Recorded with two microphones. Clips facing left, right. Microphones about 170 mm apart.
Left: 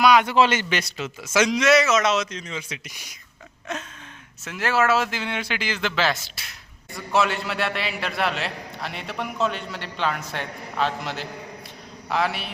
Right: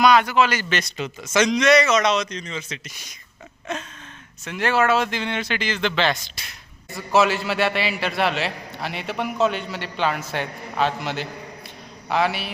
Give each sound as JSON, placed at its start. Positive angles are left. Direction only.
{"t": 0.0, "sound": "a man's voice", "side_deg": 10}
{"t": 0.3, "sound": "a man's voice", "side_deg": 25}
{"t": 0.7, "sound": "a man's voice", "side_deg": 10}
{"t": 4.4, "sound": "a man's voice", "side_deg": 5}